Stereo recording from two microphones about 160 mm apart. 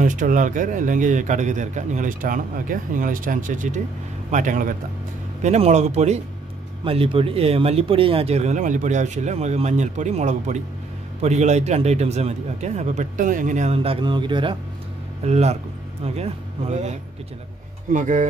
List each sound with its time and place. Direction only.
0.0 s a man's voice: 55° right (ahead or behind)
14.0 s a man's voice: 30° right (ahead or behind)
15.2 s a man's voice: 45° right (ahead or behind)